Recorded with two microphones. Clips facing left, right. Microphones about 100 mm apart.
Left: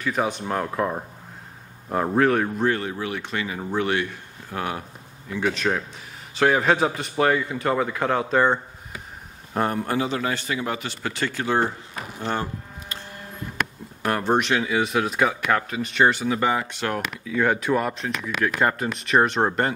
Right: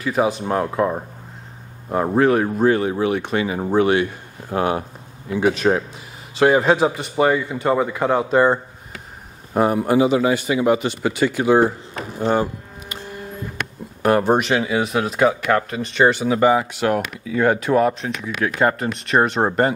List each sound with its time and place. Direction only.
0.0 s a man's voice: 5° right (ahead or behind); by 3.5 s 20° right (ahead or behind)
3.5 s speech: 30° right (ahead or behind)
3.8 s a man's voice: 15° right (ahead or behind)
5.3 s a man's voice: 15° right (ahead or behind)
14.0 s a man's voice: 10° right (ahead or behind)